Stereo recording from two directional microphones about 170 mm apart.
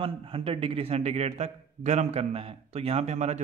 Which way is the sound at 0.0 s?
30° right (ahead or behind).